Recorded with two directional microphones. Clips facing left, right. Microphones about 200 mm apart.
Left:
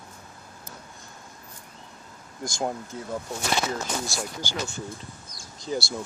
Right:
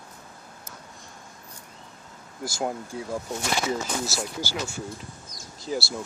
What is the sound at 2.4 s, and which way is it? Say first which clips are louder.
Speech: even; 5° right (ahead or behind).